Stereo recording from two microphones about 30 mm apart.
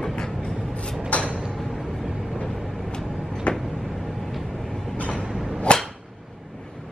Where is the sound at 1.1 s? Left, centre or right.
Left.